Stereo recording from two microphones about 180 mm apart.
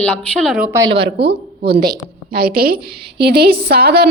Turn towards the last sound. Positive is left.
turn(degrees=-60)  # may be behind; listen again after turning